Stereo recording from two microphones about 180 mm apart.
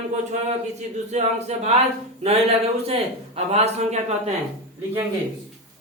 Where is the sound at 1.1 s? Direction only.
35° right (ahead or behind).